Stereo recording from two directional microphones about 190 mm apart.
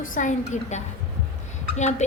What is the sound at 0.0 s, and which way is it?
A woman's voice, 45° left (ahead or behind).